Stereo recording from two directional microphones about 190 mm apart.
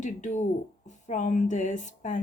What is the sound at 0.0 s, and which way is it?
Speech, 40° left (ahead or behind).